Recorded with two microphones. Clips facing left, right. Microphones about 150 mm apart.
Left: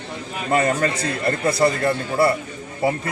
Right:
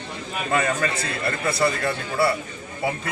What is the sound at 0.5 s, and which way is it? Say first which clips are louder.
A man's voice: left 4 dB; 40° left (ahead or behind).